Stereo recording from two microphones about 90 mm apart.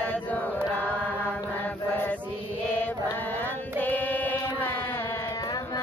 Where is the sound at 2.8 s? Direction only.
20° left (ahead or behind).